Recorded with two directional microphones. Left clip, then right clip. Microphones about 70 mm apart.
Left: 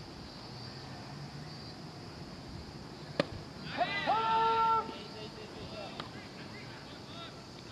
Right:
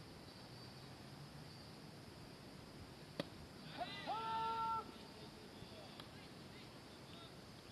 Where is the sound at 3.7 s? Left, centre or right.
Centre.